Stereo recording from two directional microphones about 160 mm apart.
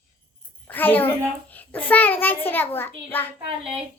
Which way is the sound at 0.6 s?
10° left (ahead or behind).